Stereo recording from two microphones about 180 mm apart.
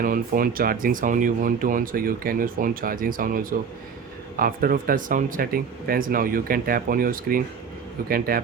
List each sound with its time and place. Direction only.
0.0 s speech: 50° right (ahead or behind)